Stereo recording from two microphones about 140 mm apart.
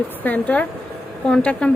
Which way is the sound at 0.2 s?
10° left (ahead or behind).